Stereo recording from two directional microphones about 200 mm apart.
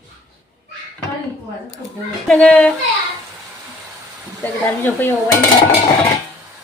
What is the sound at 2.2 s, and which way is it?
Speech, 5° left (ahead or behind).